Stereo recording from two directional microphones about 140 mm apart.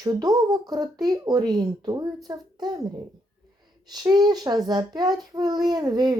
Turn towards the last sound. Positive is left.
turn(degrees=-30)  # may be behind; listen again after turning